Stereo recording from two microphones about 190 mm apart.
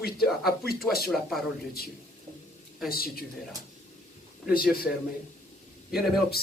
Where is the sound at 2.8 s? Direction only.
50° left (ahead or behind).